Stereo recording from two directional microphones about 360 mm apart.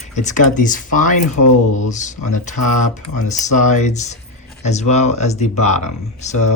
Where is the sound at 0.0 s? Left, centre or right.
Centre.